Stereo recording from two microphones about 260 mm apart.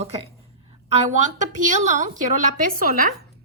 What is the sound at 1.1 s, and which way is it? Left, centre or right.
A woman's voice, right.